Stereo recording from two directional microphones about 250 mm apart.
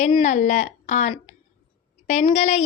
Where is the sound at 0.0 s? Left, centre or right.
Left.